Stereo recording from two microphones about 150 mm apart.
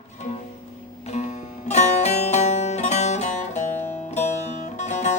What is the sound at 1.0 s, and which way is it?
Music, 50° left (ahead or behind).